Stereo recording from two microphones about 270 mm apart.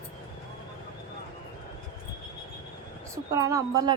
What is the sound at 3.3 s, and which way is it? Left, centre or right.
Speech, centre.